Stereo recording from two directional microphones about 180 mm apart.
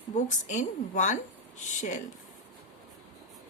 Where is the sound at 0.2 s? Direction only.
45° left (ahead or behind).